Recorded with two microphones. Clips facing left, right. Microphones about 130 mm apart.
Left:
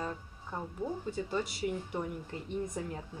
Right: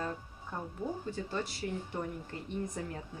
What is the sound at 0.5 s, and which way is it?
Speech, 5° left (ahead or behind).